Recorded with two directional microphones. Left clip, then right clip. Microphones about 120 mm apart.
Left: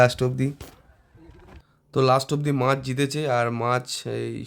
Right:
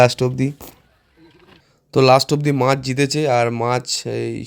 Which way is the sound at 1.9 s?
55° right (ahead or behind).